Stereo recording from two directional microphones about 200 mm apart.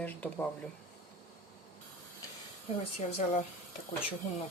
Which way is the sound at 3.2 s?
35° left (ahead or behind).